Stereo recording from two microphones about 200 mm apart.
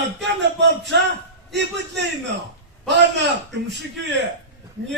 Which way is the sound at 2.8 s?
60° right (ahead or behind).